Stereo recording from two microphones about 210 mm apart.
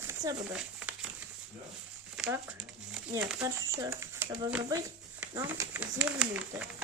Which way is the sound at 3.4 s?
15° right (ahead or behind).